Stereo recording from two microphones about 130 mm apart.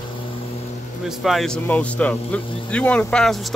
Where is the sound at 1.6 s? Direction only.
10° left (ahead or behind).